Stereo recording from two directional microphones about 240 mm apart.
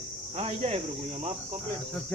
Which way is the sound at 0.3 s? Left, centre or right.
Right.